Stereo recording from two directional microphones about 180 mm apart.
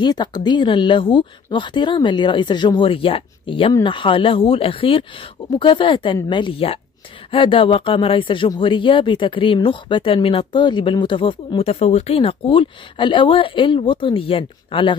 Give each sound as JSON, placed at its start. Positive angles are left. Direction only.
{"t": 0.0, "sound": "speech", "side_deg": 25}